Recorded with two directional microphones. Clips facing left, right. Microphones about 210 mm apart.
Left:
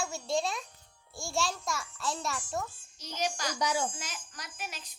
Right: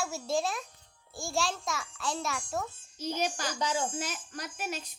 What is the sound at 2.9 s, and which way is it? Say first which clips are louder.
Speech: right 3 dB; 50° right (ahead or behind).